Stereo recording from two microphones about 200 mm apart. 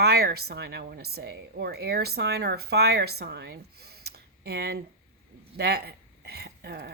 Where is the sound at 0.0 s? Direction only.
50° right (ahead or behind).